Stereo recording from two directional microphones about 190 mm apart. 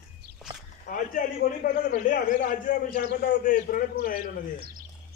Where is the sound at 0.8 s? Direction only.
45° left (ahead or behind).